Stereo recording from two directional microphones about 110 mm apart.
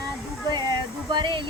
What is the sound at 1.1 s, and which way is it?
Speech, 45° right (ahead or behind).